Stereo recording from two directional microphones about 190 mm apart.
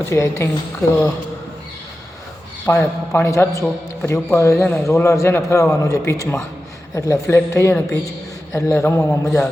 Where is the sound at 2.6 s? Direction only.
10° left (ahead or behind).